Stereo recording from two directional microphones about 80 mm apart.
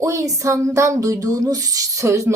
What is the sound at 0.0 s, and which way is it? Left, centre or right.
Speech, right.